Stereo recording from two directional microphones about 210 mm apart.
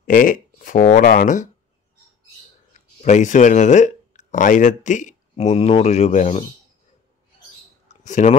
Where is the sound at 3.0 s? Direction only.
35° left (ahead or behind).